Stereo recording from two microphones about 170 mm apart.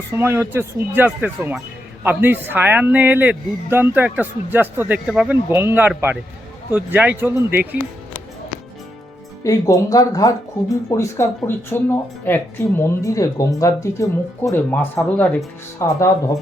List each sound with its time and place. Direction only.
0.1 s speech: 15° right (ahead or behind)
9.4 s speech: 20° left (ahead or behind)